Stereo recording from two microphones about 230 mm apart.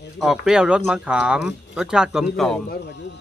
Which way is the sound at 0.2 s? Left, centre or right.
Centre.